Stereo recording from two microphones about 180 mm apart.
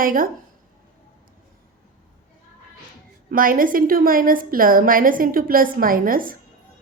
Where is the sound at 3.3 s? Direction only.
50° right (ahead or behind).